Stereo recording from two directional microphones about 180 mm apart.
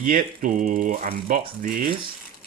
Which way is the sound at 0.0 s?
50° right (ahead or behind).